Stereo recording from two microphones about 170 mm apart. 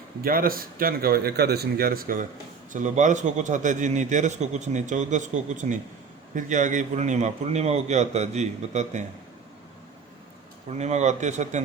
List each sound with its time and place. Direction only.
0.2 s speech: 60° right (ahead or behind)
2.7 s a man's voice: 45° right (ahead or behind)
10.7 s a man's voice: 40° right (ahead or behind)